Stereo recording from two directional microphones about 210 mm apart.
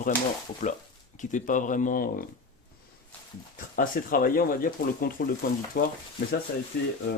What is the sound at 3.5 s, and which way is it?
Speech, 40° left (ahead or behind).